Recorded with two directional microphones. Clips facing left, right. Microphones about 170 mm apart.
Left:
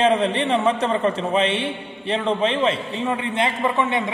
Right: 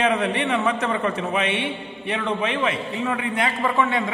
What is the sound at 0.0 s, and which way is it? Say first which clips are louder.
A man's voice: left 3 dB; 30° left (ahead or behind).